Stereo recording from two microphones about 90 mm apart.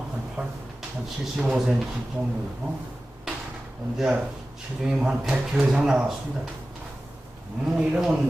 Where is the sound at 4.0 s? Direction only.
5° right (ahead or behind).